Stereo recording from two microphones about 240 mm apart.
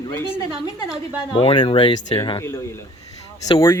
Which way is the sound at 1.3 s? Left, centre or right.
Left.